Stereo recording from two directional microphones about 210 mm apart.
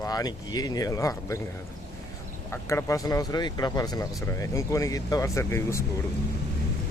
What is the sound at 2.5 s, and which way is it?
Speech, 10° left (ahead or behind).